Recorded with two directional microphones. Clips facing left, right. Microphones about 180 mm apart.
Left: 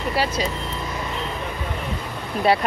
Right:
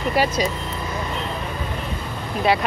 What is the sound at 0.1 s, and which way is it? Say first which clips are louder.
Speech: right 3 dB; 15° right (ahead or behind).